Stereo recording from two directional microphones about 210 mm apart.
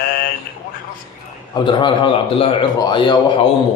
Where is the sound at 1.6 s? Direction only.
25° left (ahead or behind).